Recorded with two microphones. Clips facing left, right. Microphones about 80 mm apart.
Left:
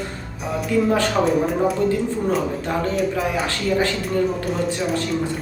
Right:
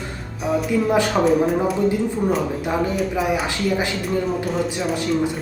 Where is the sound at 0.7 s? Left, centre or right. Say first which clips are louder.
Left 3 dB; centre.